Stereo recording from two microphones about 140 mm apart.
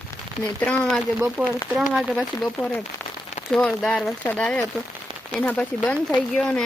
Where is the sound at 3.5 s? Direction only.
5° left (ahead or behind).